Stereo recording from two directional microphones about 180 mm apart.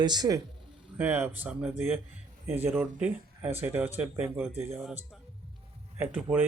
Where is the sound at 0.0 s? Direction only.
25° right (ahead or behind).